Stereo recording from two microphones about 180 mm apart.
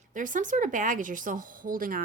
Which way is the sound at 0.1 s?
45° right (ahead or behind).